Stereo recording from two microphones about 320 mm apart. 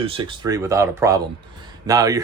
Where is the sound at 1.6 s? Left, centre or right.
Centre.